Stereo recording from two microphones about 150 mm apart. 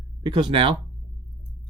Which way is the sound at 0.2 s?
30° right (ahead or behind).